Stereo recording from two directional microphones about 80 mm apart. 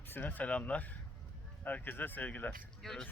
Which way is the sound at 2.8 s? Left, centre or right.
Centre.